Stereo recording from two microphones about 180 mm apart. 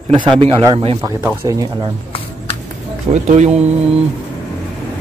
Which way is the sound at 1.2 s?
15° right (ahead or behind).